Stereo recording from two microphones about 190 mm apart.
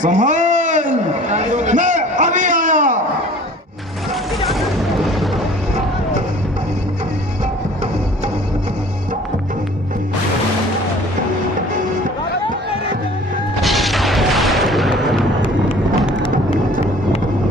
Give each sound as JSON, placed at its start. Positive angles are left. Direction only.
{"t": 0.0, "sound": "a sound", "side_deg": -40}
{"t": 4.9, "sound": "music", "side_deg": 0}
{"t": 13.6, "sound": "boom", "side_deg": 0}